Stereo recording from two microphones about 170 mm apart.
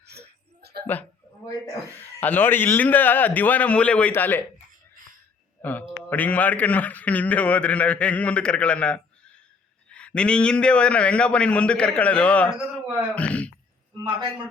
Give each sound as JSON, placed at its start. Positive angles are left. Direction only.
{"t": 0.1, "sound": "a sound", "side_deg": -70}
{"t": 2.0, "sound": "a man's voice", "side_deg": 10}
{"t": 6.1, "sound": "a man's voice", "side_deg": 10}
{"t": 14.0, "sound": "a man's voice", "side_deg": -25}